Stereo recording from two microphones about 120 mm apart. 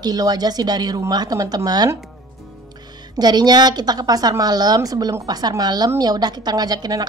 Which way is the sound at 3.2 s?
35° right (ahead or behind).